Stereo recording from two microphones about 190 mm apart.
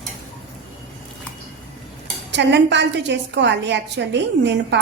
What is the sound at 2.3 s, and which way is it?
A woman's voice, 65° right (ahead or behind).